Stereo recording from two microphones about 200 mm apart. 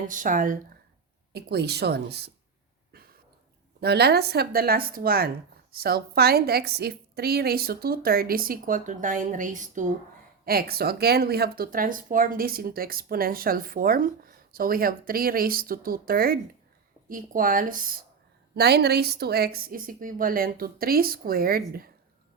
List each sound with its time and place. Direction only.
0.1 s speech: 40° right (ahead or behind)
1.3 s speech: 55° right (ahead or behind)
3.8 s speech: 55° right (ahead or behind)
10.4 s speech: 50° right (ahead or behind)